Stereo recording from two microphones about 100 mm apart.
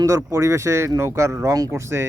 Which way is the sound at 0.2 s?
30° right (ahead or behind).